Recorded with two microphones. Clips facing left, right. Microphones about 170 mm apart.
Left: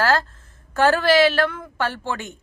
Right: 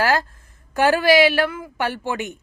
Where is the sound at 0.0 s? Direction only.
15° right (ahead or behind).